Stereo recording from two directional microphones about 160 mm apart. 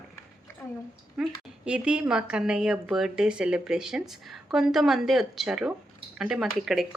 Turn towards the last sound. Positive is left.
turn(degrees=0)  # may be behind; listen again after turning